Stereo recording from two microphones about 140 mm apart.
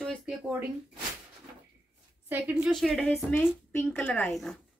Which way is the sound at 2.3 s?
10° right (ahead or behind).